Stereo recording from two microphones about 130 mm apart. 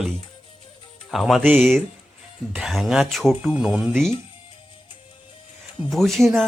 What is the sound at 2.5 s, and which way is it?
Speech, centre (ahead or behind).